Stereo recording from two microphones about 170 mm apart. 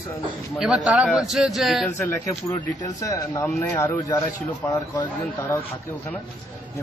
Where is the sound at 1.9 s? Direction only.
15° left (ahead or behind).